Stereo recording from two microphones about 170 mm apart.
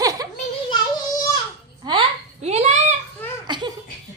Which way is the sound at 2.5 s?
40° right (ahead or behind).